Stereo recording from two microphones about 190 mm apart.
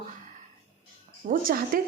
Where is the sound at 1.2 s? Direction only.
50° right (ahead or behind).